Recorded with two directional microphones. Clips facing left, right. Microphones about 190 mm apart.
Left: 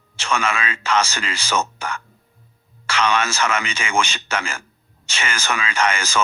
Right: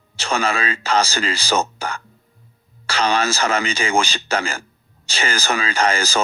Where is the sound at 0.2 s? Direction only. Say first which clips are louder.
Right 2 dB; 35° right (ahead or behind).